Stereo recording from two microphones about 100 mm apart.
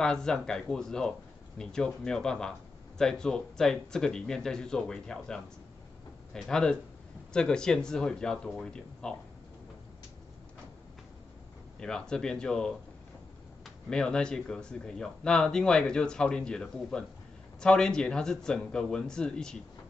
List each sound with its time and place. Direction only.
0.0 s speech: 5° left (ahead or behind)
11.8 s speech: 5° left (ahead or behind)
13.8 s speech: 10° left (ahead or behind)